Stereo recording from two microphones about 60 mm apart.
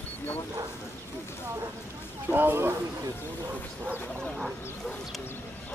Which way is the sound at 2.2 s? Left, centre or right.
Right.